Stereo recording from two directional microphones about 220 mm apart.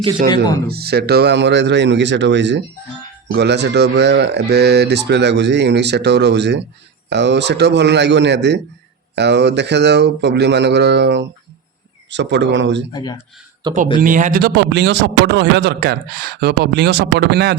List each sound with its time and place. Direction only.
0.7 s a man's voice: 45° right (ahead or behind)
12.9 s speech: 20° left (ahead or behind)
13.6 s speech: 20° right (ahead or behind)
14.0 s a man's voice: 35° right (ahead or behind)